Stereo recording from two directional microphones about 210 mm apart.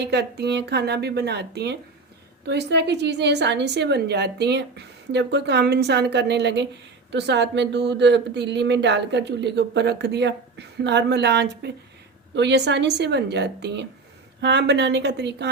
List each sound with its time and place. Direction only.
0.0 s a woman's voice: 55° right (ahead or behind)